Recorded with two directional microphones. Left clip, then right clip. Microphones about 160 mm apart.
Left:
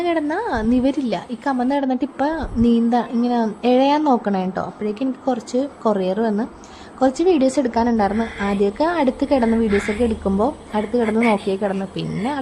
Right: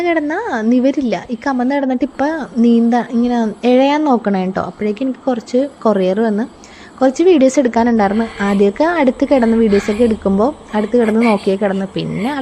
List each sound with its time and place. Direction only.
0.0 s a woman's voice: 20° right (ahead or behind)